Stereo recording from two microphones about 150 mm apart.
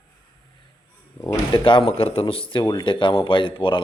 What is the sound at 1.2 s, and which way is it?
Speech, 20° left (ahead or behind).